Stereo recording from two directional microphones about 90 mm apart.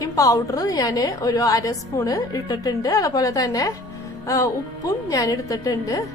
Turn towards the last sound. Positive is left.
turn(degrees=40)  # may be behind; listen again after turning